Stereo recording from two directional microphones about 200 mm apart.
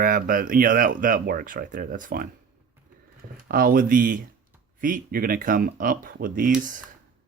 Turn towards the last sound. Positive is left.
turn(degrees=-45)  # may be behind; listen again after turning